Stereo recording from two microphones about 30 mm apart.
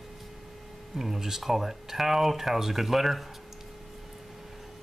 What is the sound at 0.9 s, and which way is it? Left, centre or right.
Speech, centre.